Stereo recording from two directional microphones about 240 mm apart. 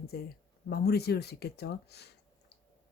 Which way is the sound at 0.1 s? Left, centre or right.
Left.